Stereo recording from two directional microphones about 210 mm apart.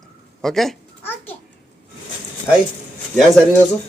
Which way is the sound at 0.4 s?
Centre (ahead or behind).